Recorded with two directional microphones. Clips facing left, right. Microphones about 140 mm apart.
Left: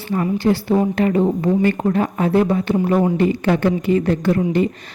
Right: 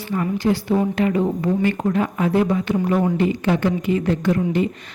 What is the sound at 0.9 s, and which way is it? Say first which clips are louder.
A woman's voice: left 3 dB; 40° left (ahead or behind).